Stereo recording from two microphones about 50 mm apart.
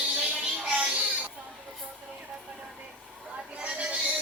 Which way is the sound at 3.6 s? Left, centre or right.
Right.